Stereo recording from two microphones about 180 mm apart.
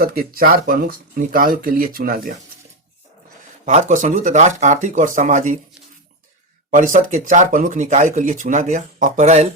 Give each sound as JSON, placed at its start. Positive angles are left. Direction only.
{"t": 0.0, "sound": "speech", "side_deg": -55}
{"t": 3.7, "sound": "speech", "side_deg": -40}
{"t": 6.7, "sound": "speech", "side_deg": -45}